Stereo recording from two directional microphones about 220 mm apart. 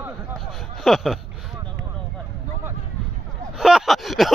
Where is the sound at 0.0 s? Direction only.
Centre (ahead or behind).